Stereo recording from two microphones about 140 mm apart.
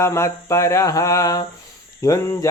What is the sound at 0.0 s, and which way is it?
Mantra, 20° left (ahead or behind).